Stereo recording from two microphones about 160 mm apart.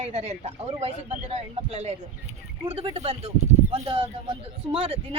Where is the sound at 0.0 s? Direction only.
40° right (ahead or behind).